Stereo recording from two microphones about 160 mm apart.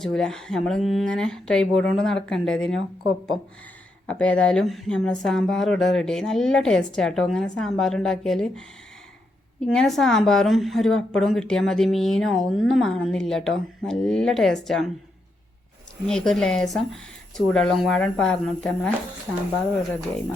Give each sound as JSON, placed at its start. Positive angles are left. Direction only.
{"t": 0.0, "sound": "a woman's voice", "side_deg": 5}
{"t": 4.0, "sound": "a woman's voice", "side_deg": 10}
{"t": 16.0, "sound": "a woman's voice", "side_deg": 5}